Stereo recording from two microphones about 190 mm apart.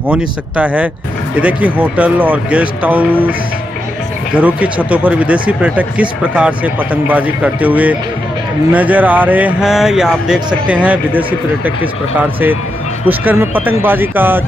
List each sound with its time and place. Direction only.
0.1 s speech: 5° right (ahead or behind)
13.0 s speech: 10° right (ahead or behind)